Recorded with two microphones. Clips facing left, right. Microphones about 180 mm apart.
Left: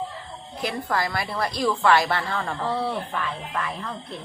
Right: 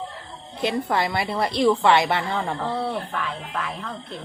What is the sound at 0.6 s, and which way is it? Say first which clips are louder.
A woman's voice: right 3 dB; 20° right (ahead or behind).